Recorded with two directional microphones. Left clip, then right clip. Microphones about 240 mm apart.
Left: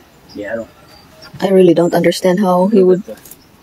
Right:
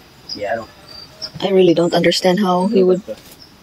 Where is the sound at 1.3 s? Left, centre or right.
Left.